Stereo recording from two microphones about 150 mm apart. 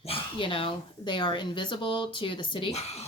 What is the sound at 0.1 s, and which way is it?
A woman's voice, 35° left (ahead or behind).